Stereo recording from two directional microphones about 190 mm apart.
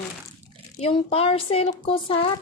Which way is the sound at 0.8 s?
30° left (ahead or behind).